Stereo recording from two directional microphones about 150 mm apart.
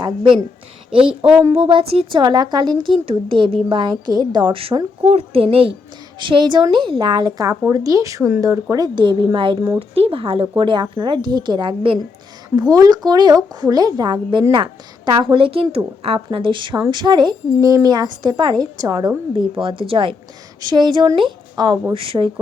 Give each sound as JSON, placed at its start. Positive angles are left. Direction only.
{"t": 0.0, "sound": "a woman's voice", "side_deg": -30}
{"t": 12.5, "sound": "a woman's voice", "side_deg": -25}